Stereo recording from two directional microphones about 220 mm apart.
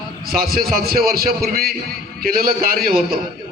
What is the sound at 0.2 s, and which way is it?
A man's voice, 40° right (ahead or behind).